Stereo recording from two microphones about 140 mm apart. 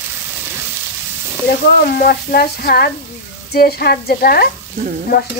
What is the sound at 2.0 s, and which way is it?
Stir, 90° left.